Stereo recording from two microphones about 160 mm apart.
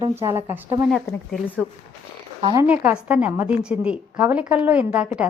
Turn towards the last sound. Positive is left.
turn(degrees=-5)  # may be behind; listen again after turning